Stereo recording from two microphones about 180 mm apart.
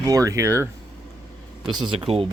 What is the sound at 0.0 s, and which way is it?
Speech, 20° right (ahead or behind).